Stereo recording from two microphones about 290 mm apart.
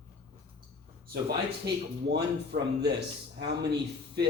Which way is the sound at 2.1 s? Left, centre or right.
Right.